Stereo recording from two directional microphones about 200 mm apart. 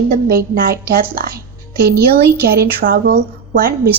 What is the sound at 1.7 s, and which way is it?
Speech, 50° right (ahead or behind).